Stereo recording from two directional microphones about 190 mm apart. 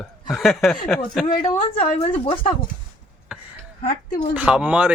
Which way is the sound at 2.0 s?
25° left (ahead or behind).